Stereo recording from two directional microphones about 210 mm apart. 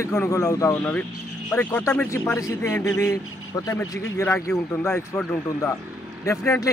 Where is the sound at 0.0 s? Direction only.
15° left (ahead or behind).